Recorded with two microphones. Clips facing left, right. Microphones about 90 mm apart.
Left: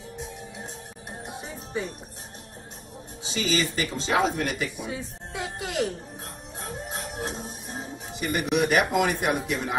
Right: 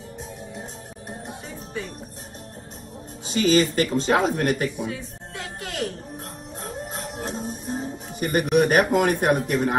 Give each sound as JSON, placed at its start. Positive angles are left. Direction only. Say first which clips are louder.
{"t": 1.2, "sound": "music", "louder": "right 1 dB", "side_deg": 15}
{"t": 3.3, "sound": "speech", "louder": "right 7 dB", "side_deg": -50}
{"t": 4.8, "sound": "music", "louder": "right 2 dB", "side_deg": 20}
{"t": 6.6, "sound": "music", "louder": "right 2 dB", "side_deg": 0}
{"t": 8.1, "sound": "speech", "louder": "right 5 dB", "side_deg": -45}